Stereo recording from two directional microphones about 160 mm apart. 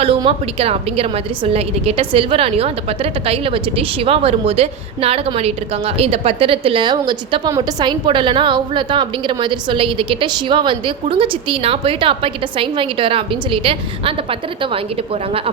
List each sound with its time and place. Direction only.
0.0 s a woman's voice: 35° right (ahead or behind)